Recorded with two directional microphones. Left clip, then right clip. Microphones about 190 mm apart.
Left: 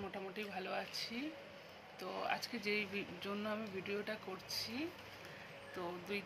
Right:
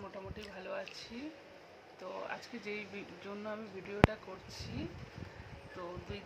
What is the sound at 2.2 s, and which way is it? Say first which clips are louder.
Speech: left 3 dB; 5° right (ahead or behind).